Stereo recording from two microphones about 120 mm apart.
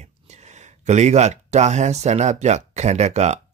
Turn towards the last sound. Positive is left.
turn(degrees=-70)  # may be behind; listen again after turning